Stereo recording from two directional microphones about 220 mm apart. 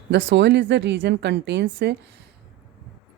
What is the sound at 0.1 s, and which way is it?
Speech, 55° right (ahead or behind).